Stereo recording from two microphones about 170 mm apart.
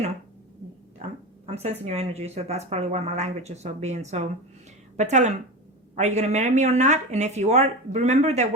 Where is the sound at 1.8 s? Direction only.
40° right (ahead or behind).